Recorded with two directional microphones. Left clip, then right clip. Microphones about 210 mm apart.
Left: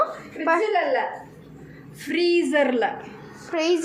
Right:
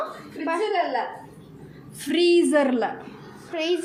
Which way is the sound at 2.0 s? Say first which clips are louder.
Right 2 dB; 50° right (ahead or behind).